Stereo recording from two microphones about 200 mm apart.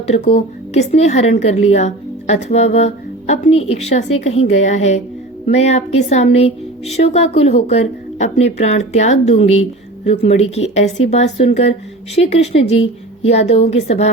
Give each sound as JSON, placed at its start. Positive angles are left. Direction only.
{"t": 0.1, "sound": "a woman's voice", "side_deg": 35}